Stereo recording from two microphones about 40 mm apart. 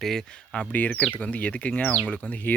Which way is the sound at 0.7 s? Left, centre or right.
Left.